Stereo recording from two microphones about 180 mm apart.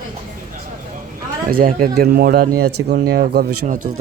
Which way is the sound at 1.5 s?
55° right (ahead or behind).